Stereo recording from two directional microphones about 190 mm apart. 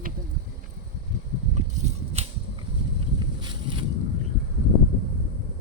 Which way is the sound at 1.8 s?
35° right (ahead or behind).